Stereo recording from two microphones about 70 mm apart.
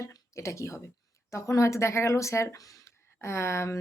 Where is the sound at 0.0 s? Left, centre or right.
Left.